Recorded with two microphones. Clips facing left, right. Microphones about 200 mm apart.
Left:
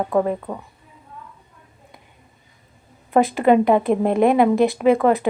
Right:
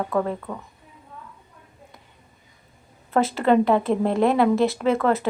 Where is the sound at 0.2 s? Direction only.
20° left (ahead or behind).